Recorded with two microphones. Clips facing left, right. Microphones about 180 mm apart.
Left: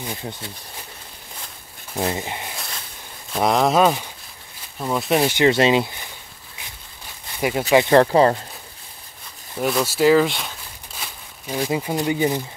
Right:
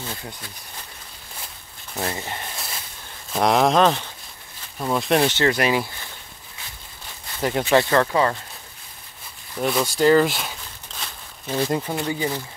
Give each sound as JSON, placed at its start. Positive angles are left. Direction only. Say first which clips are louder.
{"t": 0.0, "sound": "speech", "louder": "left 3 dB", "side_deg": 20}
{"t": 2.0, "sound": "speech", "louder": "left 4 dB", "side_deg": 15}
{"t": 3.3, "sound": "speech", "louder": "even", "side_deg": 0}
{"t": 5.5, "sound": "speech", "louder": "left 4 dB", "side_deg": 25}
{"t": 7.3, "sound": "speech", "louder": "left 1 dB", "side_deg": 10}
{"t": 7.9, "sound": "speech", "louder": "left 5 dB", "side_deg": 35}
{"t": 9.6, "sound": "speech", "louder": "left 1 dB", "side_deg": 0}
{"t": 10.9, "sound": "a sound", "louder": "even", "side_deg": 10}
{"t": 12.1, "sound": "speech", "louder": "left 7 dB", "side_deg": 15}